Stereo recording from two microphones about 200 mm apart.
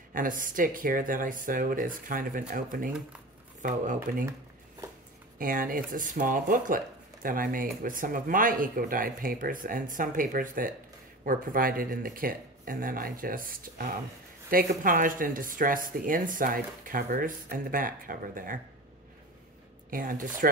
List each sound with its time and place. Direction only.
0.1 s speech: 40° right (ahead or behind)
4.3 s a sound: 15° right (ahead or behind)
5.4 s speech: 45° right (ahead or behind)
19.9 s speech: 45° right (ahead or behind)